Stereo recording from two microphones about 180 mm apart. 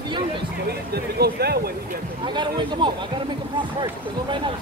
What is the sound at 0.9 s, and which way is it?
Speech, 60° right (ahead or behind).